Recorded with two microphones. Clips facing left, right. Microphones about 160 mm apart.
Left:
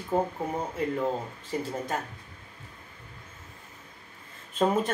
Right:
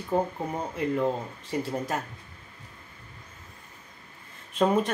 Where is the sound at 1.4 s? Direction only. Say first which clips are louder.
Right 3 dB; centre (ahead or behind).